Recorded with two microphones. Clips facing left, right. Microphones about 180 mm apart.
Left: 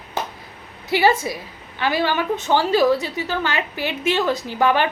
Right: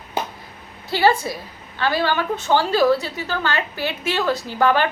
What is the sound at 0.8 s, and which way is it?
A woman's voice, 20° left (ahead or behind).